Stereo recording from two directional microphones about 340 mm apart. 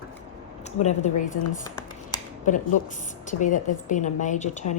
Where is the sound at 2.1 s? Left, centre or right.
Left.